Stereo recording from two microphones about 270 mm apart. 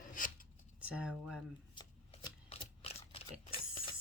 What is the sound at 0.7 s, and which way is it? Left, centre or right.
Speech, centre.